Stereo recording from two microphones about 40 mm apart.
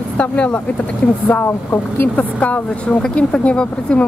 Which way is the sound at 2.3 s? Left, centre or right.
Left.